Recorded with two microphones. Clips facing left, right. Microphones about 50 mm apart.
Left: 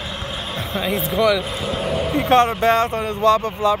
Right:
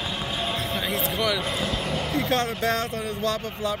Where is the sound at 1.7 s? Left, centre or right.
Centre.